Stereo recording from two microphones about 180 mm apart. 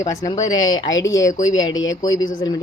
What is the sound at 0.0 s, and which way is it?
Speech, 15° left (ahead or behind).